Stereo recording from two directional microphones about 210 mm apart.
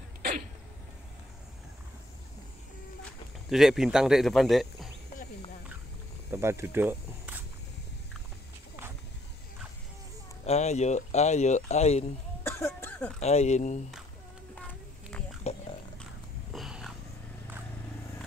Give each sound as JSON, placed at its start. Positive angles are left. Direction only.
{"t": 3.0, "sound": "speech", "side_deg": 0}
{"t": 6.3, "sound": "speech", "side_deg": -15}
{"t": 10.4, "sound": "speech", "side_deg": 30}
{"t": 12.4, "sound": "cough", "side_deg": 10}
{"t": 13.2, "sound": "speech", "side_deg": 30}
{"t": 15.5, "sound": "a sound", "side_deg": 30}
{"t": 16.5, "sound": "a sound", "side_deg": 0}